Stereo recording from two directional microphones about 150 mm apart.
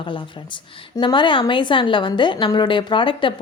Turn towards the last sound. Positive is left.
turn(degrees=35)  # may be behind; listen again after turning